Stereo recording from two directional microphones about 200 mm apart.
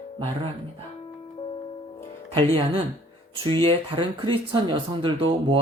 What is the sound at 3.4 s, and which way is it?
Speech, 25° right (ahead or behind).